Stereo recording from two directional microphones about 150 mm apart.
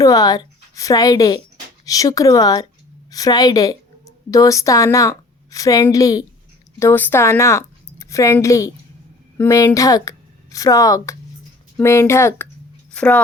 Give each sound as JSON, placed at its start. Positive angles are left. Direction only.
{"t": 0.0, "sound": "a woman's voice", "side_deg": 25}